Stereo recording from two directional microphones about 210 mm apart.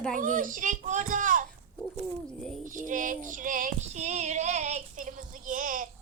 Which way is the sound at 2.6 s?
40° right (ahead or behind).